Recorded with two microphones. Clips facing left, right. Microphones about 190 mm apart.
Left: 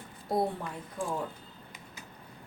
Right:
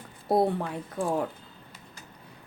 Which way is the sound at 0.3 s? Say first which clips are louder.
Right 6 dB; 70° right (ahead or behind).